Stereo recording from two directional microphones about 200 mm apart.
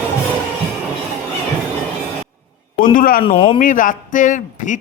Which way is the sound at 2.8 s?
45° left (ahead or behind).